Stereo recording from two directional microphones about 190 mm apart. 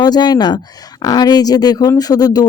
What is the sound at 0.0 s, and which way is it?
Speech, 20° left (ahead or behind).